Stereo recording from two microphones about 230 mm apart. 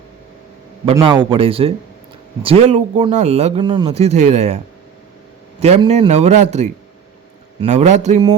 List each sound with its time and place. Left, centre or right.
1.0 s speech: right